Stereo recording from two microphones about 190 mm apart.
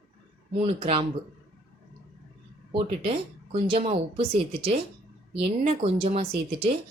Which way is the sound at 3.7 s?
30° right (ahead or behind).